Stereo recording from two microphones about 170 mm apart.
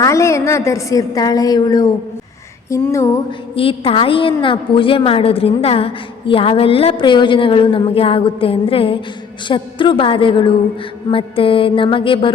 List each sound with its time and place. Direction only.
0.0 s a woman's voice: 15° left (ahead or behind)
2.6 s a sound: 15° left (ahead or behind)
3.5 s a woman's voice: 35° left (ahead or behind)